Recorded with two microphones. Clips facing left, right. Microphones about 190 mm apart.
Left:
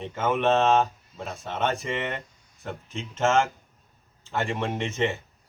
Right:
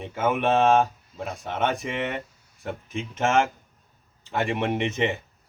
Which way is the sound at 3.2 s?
15° right (ahead or behind).